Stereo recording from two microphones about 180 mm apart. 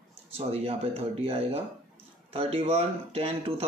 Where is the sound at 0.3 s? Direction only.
35° right (ahead or behind).